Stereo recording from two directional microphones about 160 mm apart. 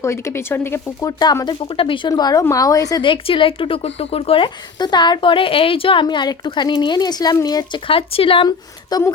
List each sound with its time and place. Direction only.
0.0 s speech: 15° left (ahead or behind)
1.2 s speech: 25° left (ahead or behind)